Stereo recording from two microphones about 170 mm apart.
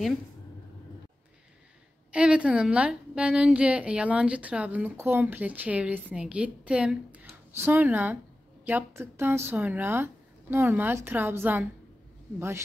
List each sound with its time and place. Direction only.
2.1 s a woman's voice: 5° right (ahead or behind)